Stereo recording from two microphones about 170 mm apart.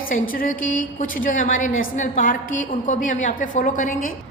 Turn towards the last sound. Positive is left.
turn(degrees=50)  # may be behind; listen again after turning